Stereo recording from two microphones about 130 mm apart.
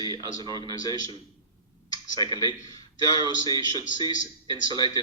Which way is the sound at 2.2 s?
30° left (ahead or behind).